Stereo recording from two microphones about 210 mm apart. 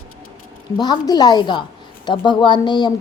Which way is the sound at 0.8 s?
20° left (ahead or behind).